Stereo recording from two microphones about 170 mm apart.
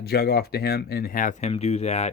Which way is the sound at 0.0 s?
70° left (ahead or behind).